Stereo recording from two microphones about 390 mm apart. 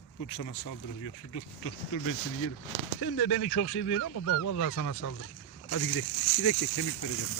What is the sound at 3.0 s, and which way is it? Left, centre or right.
Speech, left.